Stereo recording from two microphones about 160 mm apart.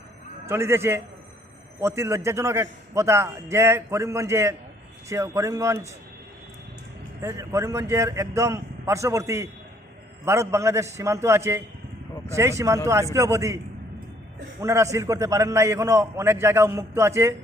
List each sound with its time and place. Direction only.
0.4 s a man's voice: 15° right (ahead or behind)
7.2 s a man's voice: 20° right (ahead or behind)
14.6 s a man's voice: 20° right (ahead or behind)